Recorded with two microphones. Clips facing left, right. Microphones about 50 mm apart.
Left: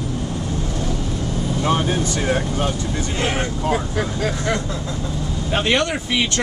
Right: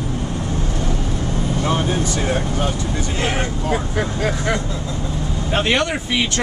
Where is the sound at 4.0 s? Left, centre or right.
Centre.